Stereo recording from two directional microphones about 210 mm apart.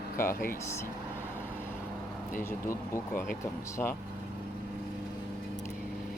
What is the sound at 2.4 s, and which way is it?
Speech, 10° left (ahead or behind).